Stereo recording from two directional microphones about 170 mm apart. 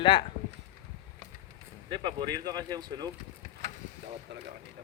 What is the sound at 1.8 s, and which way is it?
Speech, 30° right (ahead or behind).